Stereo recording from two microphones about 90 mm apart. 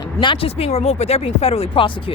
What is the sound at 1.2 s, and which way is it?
Speech, 90° left.